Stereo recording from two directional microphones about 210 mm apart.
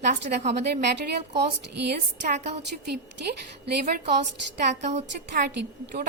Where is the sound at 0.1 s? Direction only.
50° right (ahead or behind).